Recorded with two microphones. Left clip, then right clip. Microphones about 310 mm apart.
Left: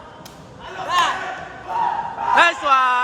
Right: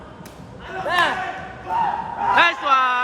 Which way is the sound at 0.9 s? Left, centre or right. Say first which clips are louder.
Left 1 dB; right.